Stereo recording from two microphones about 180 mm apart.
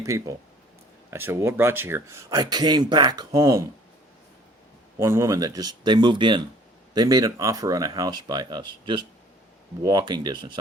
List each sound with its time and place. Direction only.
0.0 s speech: 15° right (ahead or behind)
4.9 s speech: 15° right (ahead or behind)